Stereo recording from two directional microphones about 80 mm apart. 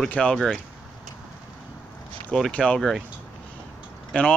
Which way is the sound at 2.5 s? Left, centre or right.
Centre.